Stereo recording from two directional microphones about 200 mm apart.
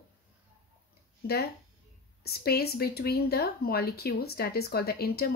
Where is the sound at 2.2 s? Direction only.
50° left (ahead or behind).